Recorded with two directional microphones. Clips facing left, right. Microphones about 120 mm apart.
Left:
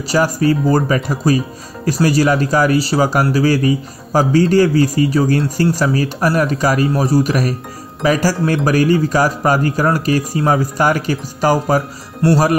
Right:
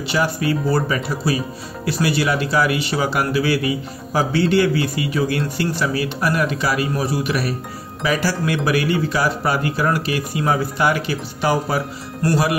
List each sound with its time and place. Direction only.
0.0 s speech: 40° left (ahead or behind)